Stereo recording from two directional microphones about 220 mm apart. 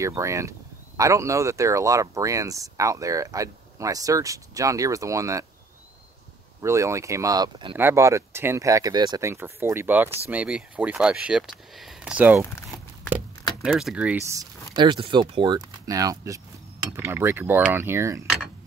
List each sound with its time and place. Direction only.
0.0 s speech: 15° right (ahead or behind)
6.6 s speech: 15° right (ahead or behind)